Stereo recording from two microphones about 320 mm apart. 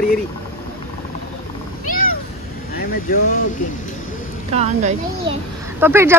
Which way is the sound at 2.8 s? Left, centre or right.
Left.